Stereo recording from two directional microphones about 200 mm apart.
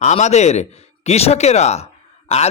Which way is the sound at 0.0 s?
35° left (ahead or behind).